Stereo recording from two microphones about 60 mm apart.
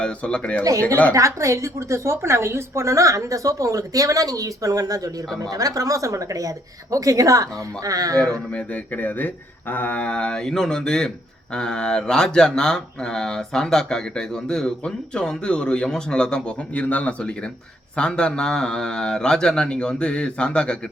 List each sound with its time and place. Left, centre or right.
0.0 s speech: centre
1.1 s a woman's voice: right
8.5 s speech: left